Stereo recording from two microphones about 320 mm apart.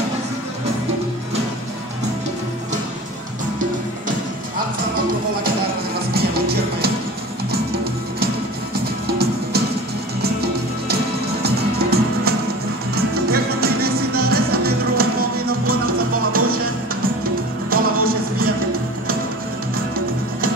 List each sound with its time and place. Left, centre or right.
6.1 s music: right
9.0 s music: right
17.6 s music: right